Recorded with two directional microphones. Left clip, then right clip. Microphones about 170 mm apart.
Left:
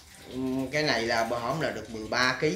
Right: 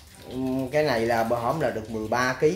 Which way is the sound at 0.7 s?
45° right (ahead or behind).